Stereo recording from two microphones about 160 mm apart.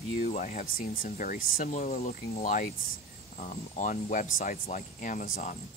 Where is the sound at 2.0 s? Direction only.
45° left (ahead or behind).